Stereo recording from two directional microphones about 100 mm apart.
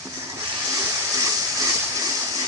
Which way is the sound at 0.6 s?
25° right (ahead or behind).